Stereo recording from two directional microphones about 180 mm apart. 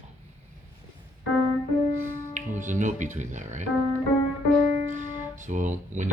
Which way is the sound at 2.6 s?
45° right (ahead or behind).